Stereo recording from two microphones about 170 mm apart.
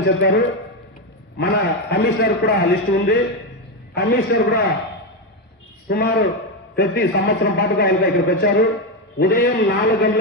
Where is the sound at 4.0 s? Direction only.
70° left (ahead or behind).